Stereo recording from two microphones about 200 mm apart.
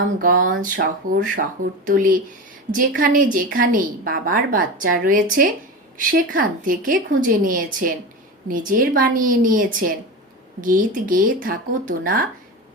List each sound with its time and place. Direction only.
0.2 s a woman's voice: 45° right (ahead or behind)